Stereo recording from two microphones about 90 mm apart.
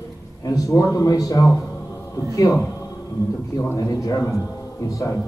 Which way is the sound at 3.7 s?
40° left (ahead or behind).